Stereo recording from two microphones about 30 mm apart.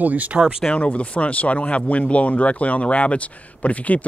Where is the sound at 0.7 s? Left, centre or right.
Left.